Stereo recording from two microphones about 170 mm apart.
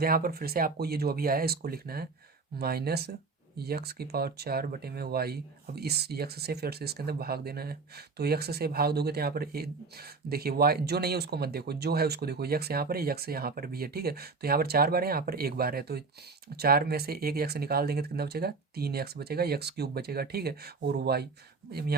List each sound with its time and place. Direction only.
0.0 s speech: 60° right (ahead or behind)